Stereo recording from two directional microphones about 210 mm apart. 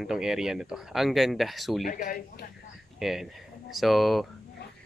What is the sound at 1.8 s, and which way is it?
Speech, 40° left (ahead or behind).